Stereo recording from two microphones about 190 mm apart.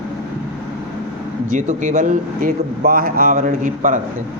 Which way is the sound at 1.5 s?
40° right (ahead or behind).